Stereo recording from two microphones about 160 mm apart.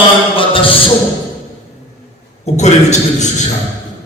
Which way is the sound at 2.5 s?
45° left (ahead or behind).